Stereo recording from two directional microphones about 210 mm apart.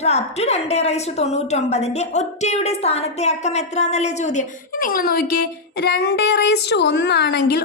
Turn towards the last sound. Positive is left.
turn(degrees=50)  # may be behind; listen again after turning